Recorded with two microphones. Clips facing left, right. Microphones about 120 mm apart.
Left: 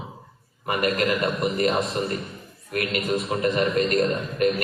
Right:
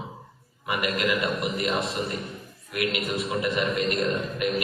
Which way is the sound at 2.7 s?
40° left (ahead or behind).